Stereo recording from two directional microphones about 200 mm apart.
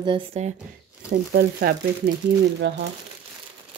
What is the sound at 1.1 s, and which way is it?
Speech, 50° right (ahead or behind).